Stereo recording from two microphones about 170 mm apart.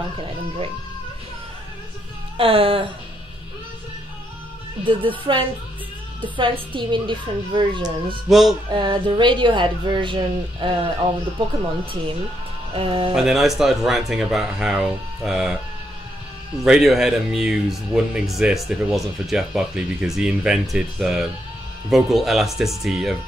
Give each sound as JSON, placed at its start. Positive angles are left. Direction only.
{"t": 2.3, "sound": "speech", "side_deg": -35}
{"t": 4.8, "sound": "speech", "side_deg": -30}
{"t": 8.3, "sound": "speech", "side_deg": 0}
{"t": 8.7, "sound": "speech", "side_deg": -30}
{"t": 13.1, "sound": "speech", "side_deg": 0}
{"t": 16.6, "sound": "speech", "side_deg": -5}